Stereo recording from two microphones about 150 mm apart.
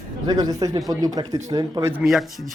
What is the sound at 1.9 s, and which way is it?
Speech, 5° right (ahead or behind).